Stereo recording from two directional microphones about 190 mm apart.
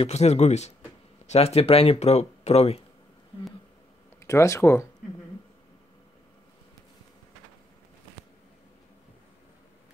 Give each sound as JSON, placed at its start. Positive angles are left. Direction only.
{"t": 0.0, "sound": "speech", "side_deg": 35}
{"t": 4.2, "sound": "speech", "side_deg": 15}